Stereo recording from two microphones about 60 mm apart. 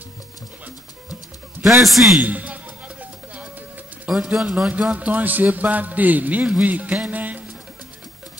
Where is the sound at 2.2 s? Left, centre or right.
Right.